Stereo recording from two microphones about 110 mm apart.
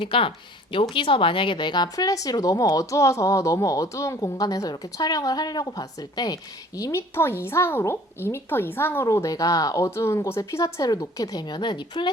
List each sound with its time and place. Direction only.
0.0 s speech: 55° left (ahead or behind)